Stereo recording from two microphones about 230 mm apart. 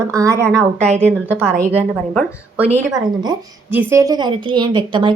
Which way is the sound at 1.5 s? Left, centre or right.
Right.